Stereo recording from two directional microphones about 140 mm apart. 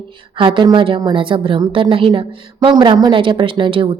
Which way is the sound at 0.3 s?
35° right (ahead or behind).